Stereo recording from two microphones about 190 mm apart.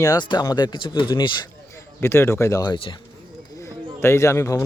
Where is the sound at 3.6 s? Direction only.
15° left (ahead or behind).